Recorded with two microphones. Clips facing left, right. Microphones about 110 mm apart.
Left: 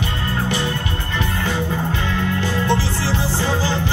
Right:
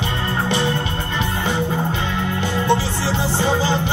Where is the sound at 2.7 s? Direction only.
20° right (ahead or behind).